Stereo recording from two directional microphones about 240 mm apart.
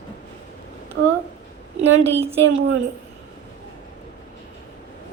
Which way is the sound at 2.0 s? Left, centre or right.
Right.